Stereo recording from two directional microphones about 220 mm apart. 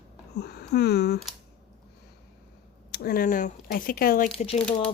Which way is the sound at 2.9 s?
45° left (ahead or behind).